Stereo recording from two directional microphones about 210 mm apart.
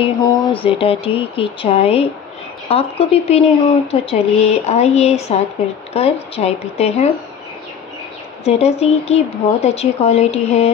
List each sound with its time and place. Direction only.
0.0 s speech: 15° left (ahead or behind)
4.6 s a sound: 30° left (ahead or behind)
5.9 s speech: 30° left (ahead or behind)
8.5 s speech: 30° left (ahead or behind)